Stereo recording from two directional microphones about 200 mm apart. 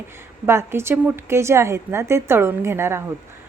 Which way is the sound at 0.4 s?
10° right (ahead or behind).